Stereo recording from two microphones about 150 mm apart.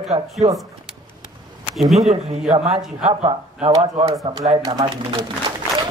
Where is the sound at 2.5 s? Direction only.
45° right (ahead or behind).